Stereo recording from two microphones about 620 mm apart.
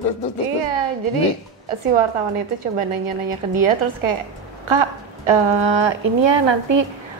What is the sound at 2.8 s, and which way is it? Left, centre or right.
Speech, right.